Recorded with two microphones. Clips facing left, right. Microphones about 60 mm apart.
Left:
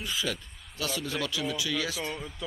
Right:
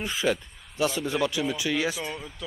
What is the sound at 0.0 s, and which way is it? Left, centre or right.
Speech, right.